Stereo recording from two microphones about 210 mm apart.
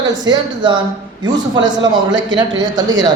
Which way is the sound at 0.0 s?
20° right (ahead or behind).